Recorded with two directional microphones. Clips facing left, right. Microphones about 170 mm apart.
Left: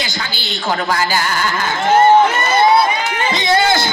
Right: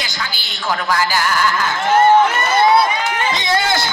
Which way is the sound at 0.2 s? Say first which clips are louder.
Left 3 dB; 25° left (ahead or behind).